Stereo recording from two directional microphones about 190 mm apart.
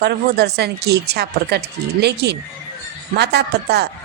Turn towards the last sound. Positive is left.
turn(degrees=-60)  # may be behind; listen again after turning